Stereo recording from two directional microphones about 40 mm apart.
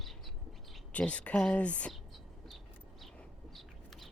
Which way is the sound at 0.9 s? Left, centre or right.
Left.